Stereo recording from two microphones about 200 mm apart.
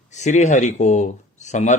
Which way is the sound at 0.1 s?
35° left (ahead or behind).